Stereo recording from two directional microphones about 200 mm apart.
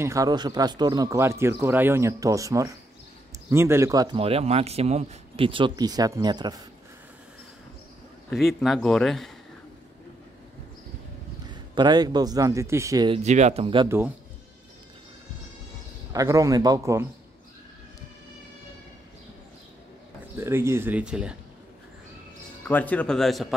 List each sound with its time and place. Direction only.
0.0 s speech: 15° right (ahead or behind)
4.2 s speech: 30° right (ahead or behind)
8.3 s speech: centre (ahead or behind)
11.4 s speech: 20° right (ahead or behind)
13.2 s speech: 35° right (ahead or behind)
13.8 s speech: 10° right (ahead or behind)
16.1 s speech: 15° right (ahead or behind)
20.3 s speech: 10° right (ahead or behind)
22.7 s speech: 10° left (ahead or behind)